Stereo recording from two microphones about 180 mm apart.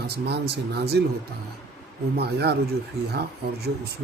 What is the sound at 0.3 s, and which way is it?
Speech, 65° right (ahead or behind).